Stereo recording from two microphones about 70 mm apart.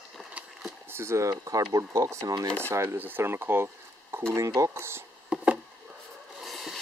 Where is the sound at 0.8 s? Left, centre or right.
Right.